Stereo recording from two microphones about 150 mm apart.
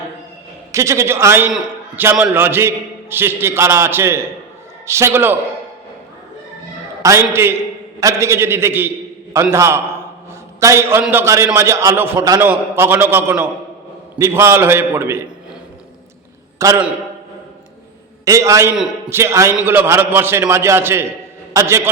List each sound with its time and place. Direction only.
0.7 s a man's voice: 20° right (ahead or behind)
7.0 s a man's voice: 20° right (ahead or behind)
16.6 s a man's voice: 20° right (ahead or behind)
18.3 s a man's voice: 20° right (ahead or behind)